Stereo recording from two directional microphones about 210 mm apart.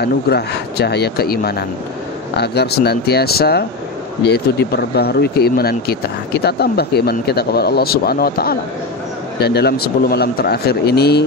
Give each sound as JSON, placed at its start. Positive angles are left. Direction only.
{"t": 0.0, "sound": "speech", "side_deg": 50}